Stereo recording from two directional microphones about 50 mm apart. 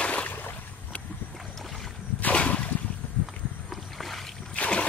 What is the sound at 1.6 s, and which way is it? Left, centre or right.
Boat, centre.